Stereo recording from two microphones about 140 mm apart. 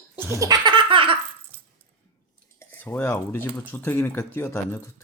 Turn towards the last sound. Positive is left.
turn(degrees=15)  # may be behind; listen again after turning